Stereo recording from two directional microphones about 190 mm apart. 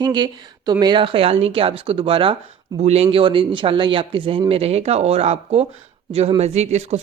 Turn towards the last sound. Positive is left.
turn(degrees=-35)  # may be behind; listen again after turning